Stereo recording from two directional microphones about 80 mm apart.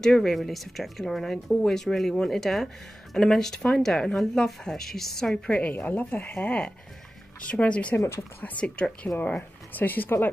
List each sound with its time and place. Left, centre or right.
0.0 s speech: centre
8.0 s speech: left
8.4 s speech: centre